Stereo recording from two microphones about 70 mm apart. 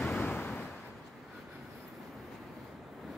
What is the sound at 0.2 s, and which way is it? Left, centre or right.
Waves, left.